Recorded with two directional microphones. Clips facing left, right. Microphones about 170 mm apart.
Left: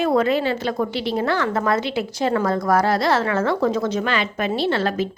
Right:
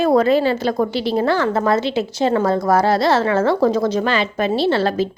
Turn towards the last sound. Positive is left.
turn(degrees=-30)  # may be behind; listen again after turning